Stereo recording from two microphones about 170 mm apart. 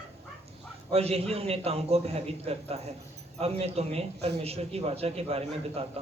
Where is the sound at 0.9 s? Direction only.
35° right (ahead or behind).